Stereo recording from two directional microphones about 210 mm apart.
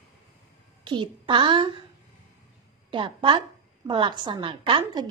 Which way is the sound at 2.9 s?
25° right (ahead or behind).